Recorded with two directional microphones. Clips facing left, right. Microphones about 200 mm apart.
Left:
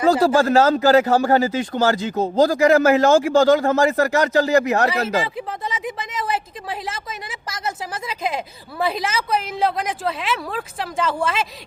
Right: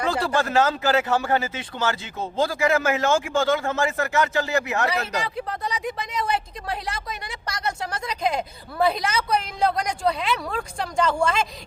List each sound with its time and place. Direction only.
0.1 s speech: 40° left (ahead or behind)
5.2 s speech: centre (ahead or behind)